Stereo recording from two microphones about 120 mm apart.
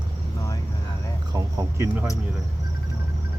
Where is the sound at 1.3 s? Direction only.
30° right (ahead or behind).